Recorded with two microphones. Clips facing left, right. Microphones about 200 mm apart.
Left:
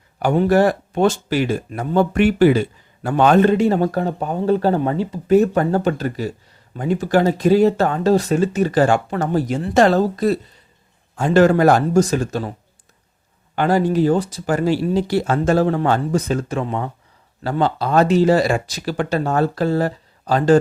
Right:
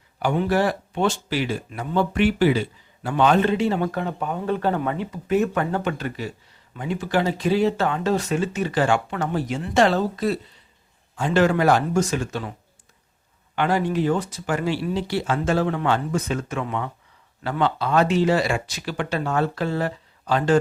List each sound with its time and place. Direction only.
0.2 s speech: 45° left (ahead or behind)
13.6 s speech: 40° left (ahead or behind)